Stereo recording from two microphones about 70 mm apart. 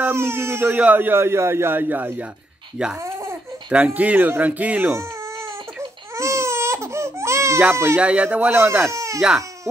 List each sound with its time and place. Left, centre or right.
0.1 s a man's voice: right
3.0 s a sound: right
3.7 s speech: right
6.1 s baby cry: right
7.7 s a man's voice: right
8.0 s a man's voice: centre; by 9.2 s right